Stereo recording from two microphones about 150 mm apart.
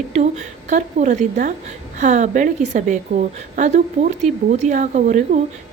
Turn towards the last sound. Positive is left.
turn(degrees=-55)  # may be behind; listen again after turning